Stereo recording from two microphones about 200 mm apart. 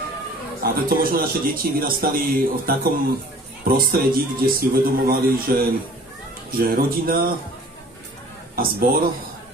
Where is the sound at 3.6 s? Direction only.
50° right (ahead or behind).